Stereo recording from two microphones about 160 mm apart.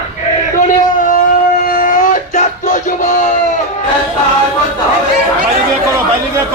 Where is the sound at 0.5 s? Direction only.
55° left (ahead or behind).